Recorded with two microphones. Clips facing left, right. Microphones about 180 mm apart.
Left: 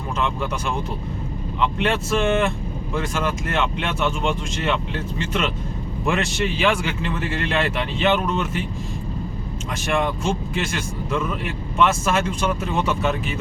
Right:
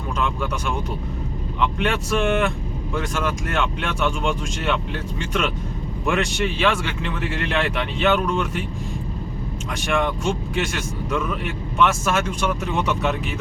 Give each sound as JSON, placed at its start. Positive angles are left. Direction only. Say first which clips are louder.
{"t": 1.6, "sound": "speech", "louder": "left 1 dB", "side_deg": 0}
{"t": 9.8, "sound": "speech", "louder": "even", "side_deg": 0}